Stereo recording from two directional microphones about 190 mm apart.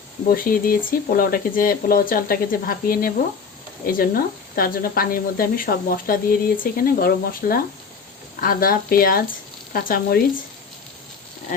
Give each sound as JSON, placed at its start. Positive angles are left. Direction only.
{"t": 0.3, "sound": "speech", "side_deg": 50}